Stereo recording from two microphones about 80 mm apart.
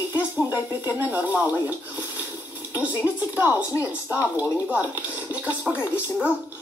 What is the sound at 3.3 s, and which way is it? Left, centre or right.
Speech, right.